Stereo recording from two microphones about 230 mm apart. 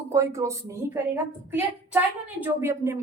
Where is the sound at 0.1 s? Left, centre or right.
Centre.